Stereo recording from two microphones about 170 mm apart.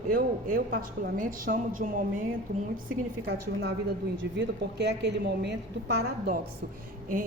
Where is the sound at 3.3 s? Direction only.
75° right (ahead or behind).